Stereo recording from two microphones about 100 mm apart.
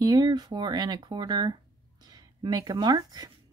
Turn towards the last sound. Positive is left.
turn(degrees=-40)  # may be behind; listen again after turning